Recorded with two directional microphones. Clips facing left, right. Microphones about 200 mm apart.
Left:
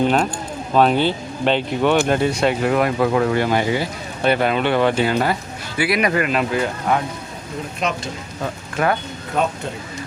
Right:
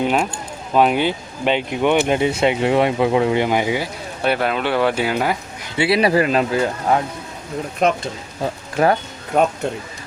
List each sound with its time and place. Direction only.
0.0 s speech: 10° right (ahead or behind)
5.7 s speech: 25° right (ahead or behind)
7.8 s speech: 50° right (ahead or behind)
8.8 s speech: 35° right (ahead or behind)
9.3 s speech: 55° right (ahead or behind)